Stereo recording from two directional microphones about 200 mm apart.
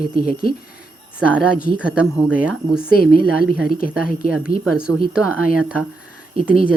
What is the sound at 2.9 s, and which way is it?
Speech, 45° left (ahead or behind).